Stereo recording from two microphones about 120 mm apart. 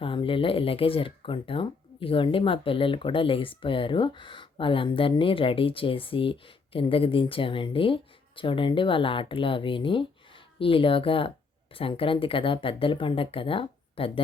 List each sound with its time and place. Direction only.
0.0 s speech: 45° left (ahead or behind)